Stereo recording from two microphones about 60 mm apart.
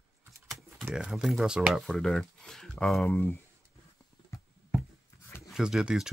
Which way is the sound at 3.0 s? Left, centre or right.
Left.